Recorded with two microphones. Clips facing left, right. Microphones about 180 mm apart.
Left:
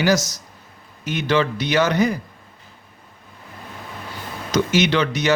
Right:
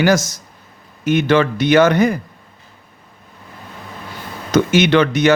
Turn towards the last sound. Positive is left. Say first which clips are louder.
# right 6 dB
turn(degrees=-55)  # may be behind; listen again after turning